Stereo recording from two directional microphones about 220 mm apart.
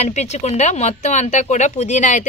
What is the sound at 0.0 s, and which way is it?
Speech, 30° left (ahead or behind).